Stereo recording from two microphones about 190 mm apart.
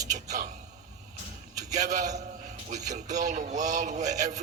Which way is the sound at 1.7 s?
40° right (ahead or behind).